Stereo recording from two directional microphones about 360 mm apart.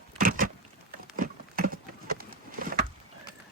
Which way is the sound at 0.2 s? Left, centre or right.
Right.